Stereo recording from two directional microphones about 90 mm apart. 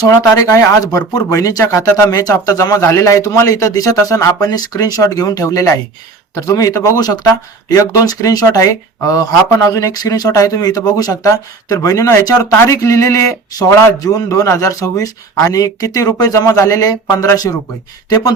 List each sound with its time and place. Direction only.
0.1 s speech: 35° left (ahead or behind)